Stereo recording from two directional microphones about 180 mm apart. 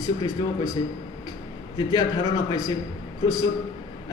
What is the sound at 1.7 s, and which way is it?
A man's voice, 20° left (ahead or behind).